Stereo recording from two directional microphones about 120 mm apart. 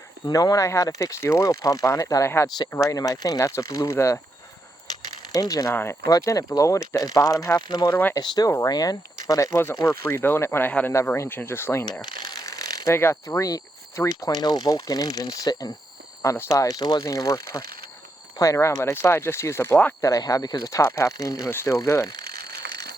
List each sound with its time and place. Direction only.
0.3 s speech: 30° left (ahead or behind)
5.3 s speech: 30° left (ahead or behind)
12.0 s speech: 35° left (ahead or behind)